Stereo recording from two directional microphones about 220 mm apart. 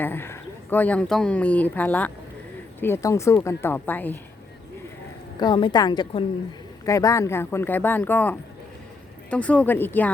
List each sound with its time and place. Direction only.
0.0 s speech: 10° left (ahead or behind)
5.4 s a woman's voice: 20° left (ahead or behind)